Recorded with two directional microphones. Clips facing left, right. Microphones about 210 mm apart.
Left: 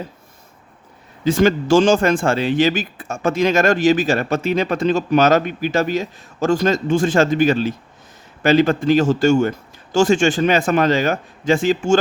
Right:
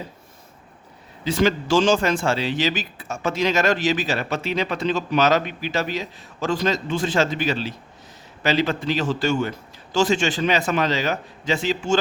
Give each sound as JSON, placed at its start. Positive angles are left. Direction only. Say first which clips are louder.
{"t": 1.2, "sound": "speech", "louder": "left 5 dB", "side_deg": 50}